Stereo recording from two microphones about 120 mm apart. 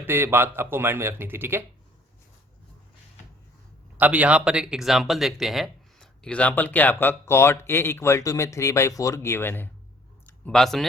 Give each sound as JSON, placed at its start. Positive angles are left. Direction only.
{"t": 0.0, "sound": "speech", "side_deg": -20}
{"t": 3.9, "sound": "speech", "side_deg": -15}